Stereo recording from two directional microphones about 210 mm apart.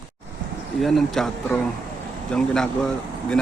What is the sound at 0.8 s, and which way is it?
Speech, centre (ahead or behind).